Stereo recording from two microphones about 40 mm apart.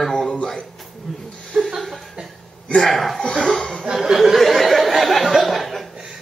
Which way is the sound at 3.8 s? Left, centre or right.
Centre.